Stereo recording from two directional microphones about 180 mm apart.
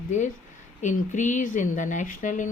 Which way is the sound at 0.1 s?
45° left (ahead or behind).